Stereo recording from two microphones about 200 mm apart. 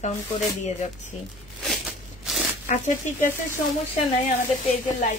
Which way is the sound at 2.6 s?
40° left (ahead or behind).